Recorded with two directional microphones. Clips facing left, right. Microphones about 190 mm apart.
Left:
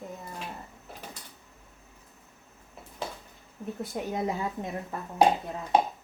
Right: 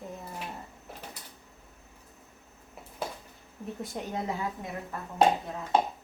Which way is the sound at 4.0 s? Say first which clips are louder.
Left 4 dB; 5° left (ahead or behind).